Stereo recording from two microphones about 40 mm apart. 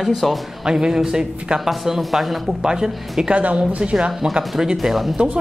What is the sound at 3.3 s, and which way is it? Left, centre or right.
Speech, right.